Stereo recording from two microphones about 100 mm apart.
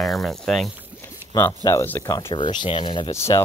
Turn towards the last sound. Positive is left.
turn(degrees=25)  # may be behind; listen again after turning